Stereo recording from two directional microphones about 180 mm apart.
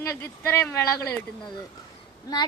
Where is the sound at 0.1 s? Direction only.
10° left (ahead or behind).